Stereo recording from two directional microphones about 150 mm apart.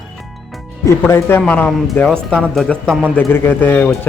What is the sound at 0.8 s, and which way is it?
Speech, 20° left (ahead or behind).